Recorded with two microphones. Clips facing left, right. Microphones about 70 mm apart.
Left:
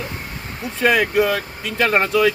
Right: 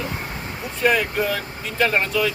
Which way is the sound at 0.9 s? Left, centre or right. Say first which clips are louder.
Left 4 dB; left.